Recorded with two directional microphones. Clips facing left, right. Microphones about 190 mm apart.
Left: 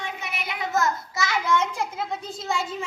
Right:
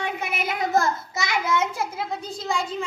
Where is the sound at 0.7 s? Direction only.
35° right (ahead or behind).